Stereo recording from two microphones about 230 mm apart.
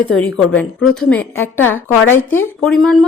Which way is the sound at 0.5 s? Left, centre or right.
Centre.